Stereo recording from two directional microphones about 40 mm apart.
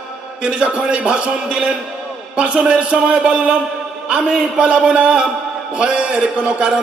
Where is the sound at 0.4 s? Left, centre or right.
Right.